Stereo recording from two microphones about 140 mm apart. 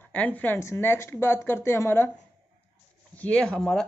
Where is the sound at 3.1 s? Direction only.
10° left (ahead or behind).